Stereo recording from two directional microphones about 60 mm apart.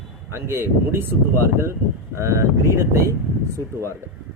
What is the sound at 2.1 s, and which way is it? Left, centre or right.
Speech, right.